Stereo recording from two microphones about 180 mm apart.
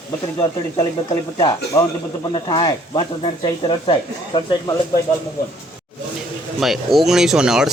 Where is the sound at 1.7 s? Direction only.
15° left (ahead or behind).